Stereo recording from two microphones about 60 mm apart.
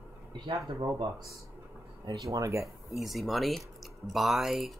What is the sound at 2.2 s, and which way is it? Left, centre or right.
Speech, right.